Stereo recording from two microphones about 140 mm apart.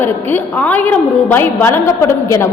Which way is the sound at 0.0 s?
15° left (ahead or behind).